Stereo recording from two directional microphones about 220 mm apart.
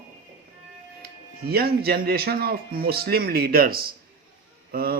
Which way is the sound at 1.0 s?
45° right (ahead or behind).